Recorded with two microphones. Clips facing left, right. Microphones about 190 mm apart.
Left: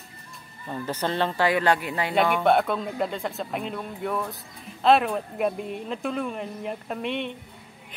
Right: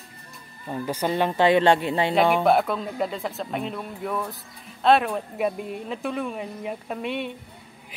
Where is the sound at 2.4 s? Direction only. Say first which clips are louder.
Right 1 dB; centre (ahead or behind).